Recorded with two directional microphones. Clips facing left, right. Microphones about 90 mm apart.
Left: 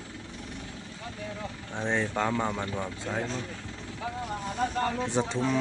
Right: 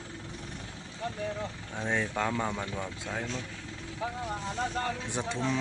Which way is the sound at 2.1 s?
5° left (ahead or behind).